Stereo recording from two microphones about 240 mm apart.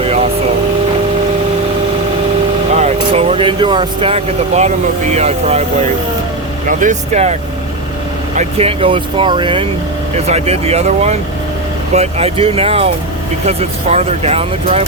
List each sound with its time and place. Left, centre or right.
0.0 s air conditioning: right
2.7 s speech: right
6.7 s speech: right
8.4 s speech: right